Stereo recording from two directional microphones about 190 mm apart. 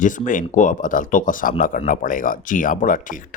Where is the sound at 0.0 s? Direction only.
45° left (ahead or behind).